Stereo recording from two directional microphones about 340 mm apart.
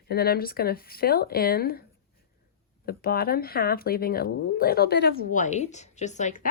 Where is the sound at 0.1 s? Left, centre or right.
Left.